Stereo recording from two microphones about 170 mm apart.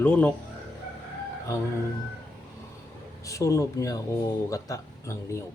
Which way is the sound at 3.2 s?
20° left (ahead or behind).